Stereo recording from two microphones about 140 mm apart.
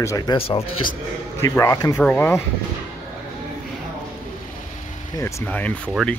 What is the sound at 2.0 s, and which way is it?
Speech, 10° left (ahead or behind).